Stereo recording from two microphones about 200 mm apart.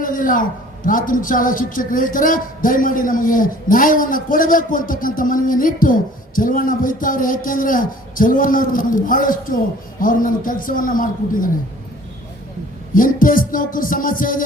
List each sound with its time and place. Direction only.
0.0 s a man's voice: 45° left (ahead or behind)
12.9 s a man's voice: 45° left (ahead or behind)